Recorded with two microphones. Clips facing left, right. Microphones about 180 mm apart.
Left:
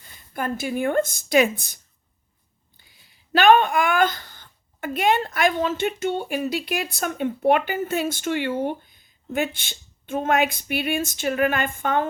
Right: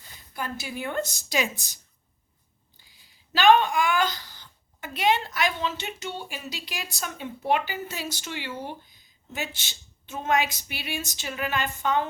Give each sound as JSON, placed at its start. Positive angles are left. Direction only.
{"t": 0.3, "sound": "a woman's voice", "side_deg": 50}